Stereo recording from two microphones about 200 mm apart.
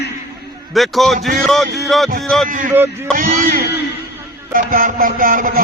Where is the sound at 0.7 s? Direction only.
Centre (ahead or behind).